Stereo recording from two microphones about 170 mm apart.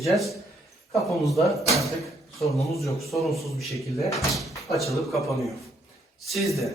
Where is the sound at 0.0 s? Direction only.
Centre (ahead or behind).